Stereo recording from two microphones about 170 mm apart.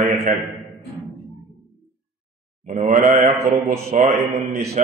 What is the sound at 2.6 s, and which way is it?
A man's voice, 50° right (ahead or behind).